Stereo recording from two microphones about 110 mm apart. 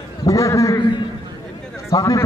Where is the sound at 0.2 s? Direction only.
30° left (ahead or behind).